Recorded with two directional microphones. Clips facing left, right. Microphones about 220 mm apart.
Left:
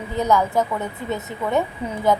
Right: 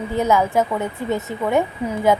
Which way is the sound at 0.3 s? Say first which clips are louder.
Right 1 dB; 20° right (ahead or behind).